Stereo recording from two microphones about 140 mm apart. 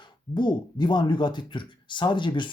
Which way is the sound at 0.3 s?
35° left (ahead or behind).